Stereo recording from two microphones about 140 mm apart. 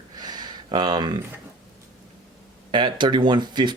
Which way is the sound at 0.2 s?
30° right (ahead or behind).